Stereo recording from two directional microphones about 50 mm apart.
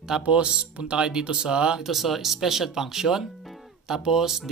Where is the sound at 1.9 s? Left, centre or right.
Centre.